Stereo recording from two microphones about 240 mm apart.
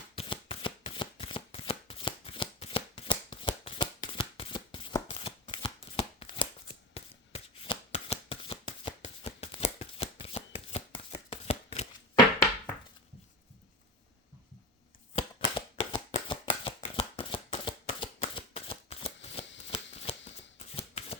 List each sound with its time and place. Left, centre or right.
0.2 s shuffling cards: left
15.1 s shuffling cards: left